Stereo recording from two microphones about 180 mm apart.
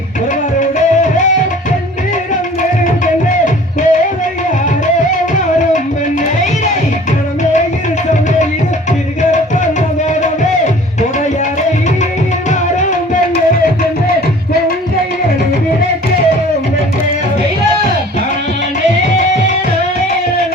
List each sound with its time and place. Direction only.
2.8 s music: 45° left (ahead or behind)